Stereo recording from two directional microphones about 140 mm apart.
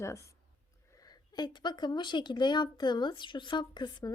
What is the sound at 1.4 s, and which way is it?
Speech, 30° left (ahead or behind).